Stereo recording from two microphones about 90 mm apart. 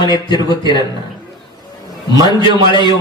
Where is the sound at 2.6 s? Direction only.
60° left (ahead or behind).